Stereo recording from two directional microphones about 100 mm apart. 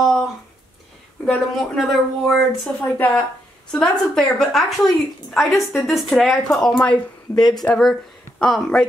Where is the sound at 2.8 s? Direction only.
15° left (ahead or behind).